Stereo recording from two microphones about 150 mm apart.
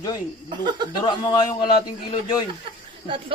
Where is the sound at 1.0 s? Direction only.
30° left (ahead or behind).